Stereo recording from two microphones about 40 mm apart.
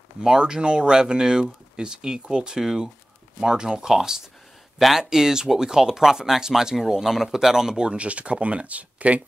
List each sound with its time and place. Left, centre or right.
0.2 s speech: centre; by 9.2 s right